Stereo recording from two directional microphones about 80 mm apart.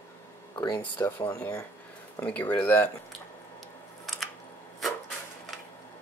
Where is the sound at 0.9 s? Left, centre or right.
Left.